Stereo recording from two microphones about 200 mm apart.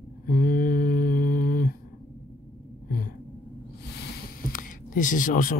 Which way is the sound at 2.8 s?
45° left (ahead or behind).